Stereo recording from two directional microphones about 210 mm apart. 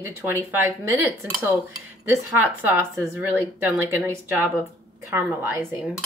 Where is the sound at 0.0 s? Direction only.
10° right (ahead or behind).